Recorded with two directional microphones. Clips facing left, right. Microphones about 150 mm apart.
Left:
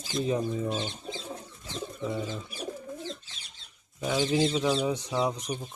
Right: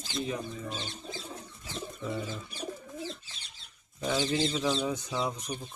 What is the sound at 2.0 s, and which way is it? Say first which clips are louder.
Bird: left 3 dB; centre (ahead or behind).